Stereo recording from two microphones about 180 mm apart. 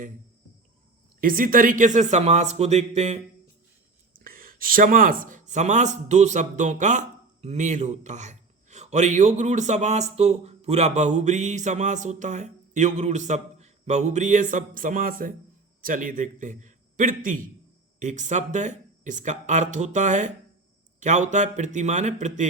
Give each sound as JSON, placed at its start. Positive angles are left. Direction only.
{"t": 1.2, "sound": "a man's voice", "side_deg": -50}
{"t": 4.1, "sound": "a man's voice", "side_deg": -55}